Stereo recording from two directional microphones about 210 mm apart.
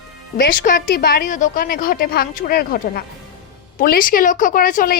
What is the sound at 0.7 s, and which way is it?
A woman's voice, 45° left (ahead or behind).